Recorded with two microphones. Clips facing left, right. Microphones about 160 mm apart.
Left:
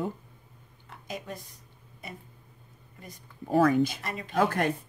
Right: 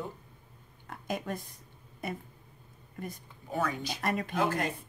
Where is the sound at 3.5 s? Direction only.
50° left (ahead or behind).